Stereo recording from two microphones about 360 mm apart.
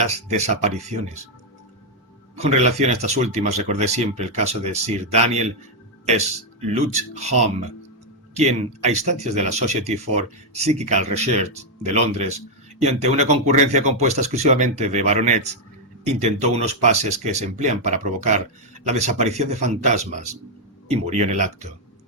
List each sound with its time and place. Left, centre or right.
0.0 s speech: centre
2.4 s speech: centre
6.7 s speech: centre